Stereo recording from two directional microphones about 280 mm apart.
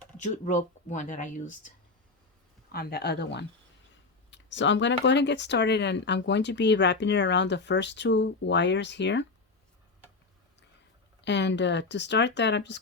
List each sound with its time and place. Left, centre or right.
0.2 s speech: left
2.7 s speech: left
11.2 s speech: left